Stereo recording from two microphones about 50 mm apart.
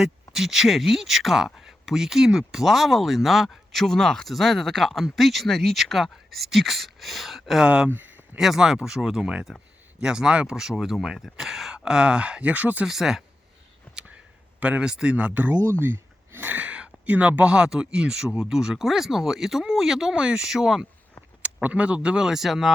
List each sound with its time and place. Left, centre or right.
0.0 s speech: centre
7.6 s speech: centre
7.9 s a sound: right
8.4 s speech: centre; by 12.8 s right
12.8 s speech: centre
14.6 s speech: right
15.8 s speech: right; by 20.8 s centre
21.4 s speech: right; by 22.7 s centre